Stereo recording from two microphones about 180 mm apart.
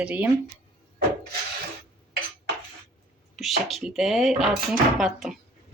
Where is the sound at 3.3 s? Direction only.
Centre (ahead or behind).